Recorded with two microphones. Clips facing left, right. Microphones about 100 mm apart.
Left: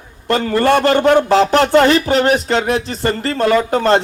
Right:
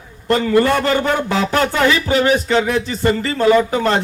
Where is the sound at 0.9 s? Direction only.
60° left (ahead or behind).